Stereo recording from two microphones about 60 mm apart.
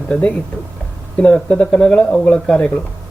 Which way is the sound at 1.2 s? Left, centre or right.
Centre.